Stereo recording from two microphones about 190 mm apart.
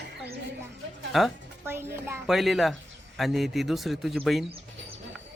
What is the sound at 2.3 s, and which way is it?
Speech, centre (ahead or behind).